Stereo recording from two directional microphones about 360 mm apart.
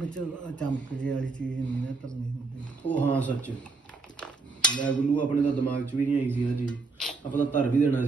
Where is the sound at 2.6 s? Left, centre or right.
Centre.